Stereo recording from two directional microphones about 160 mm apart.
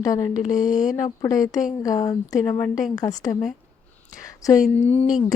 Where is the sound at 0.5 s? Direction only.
55° left (ahead or behind).